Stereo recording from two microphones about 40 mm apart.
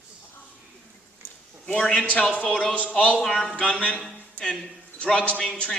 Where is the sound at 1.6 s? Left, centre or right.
Left.